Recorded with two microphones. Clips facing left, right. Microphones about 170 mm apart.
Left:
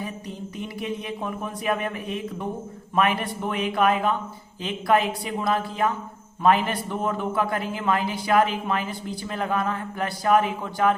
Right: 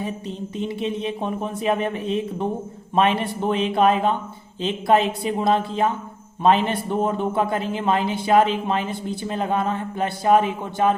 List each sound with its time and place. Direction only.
0.0 s speech: 25° right (ahead or behind)